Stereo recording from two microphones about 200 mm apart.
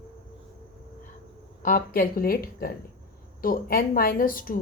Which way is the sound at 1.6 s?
45° left (ahead or behind).